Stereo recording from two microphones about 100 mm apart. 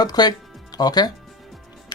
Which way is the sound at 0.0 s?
45° left (ahead or behind).